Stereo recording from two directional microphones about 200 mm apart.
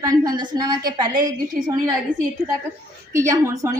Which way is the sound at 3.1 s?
15° right (ahead or behind).